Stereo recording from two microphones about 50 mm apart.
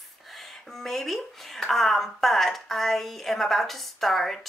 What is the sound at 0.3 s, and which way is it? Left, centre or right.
Speech, centre.